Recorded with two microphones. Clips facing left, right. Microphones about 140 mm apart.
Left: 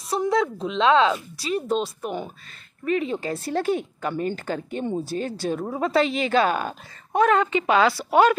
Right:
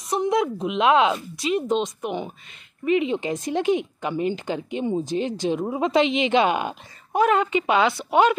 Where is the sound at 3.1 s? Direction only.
20° right (ahead or behind).